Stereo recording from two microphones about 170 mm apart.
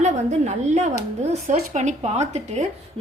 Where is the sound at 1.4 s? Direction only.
45° right (ahead or behind).